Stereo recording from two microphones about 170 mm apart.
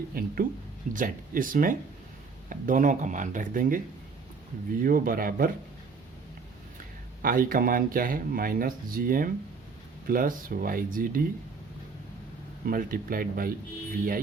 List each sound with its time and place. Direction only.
0.1 s speech: 60° right (ahead or behind)
7.2 s speech: 55° right (ahead or behind)
12.6 s speech: 55° right (ahead or behind)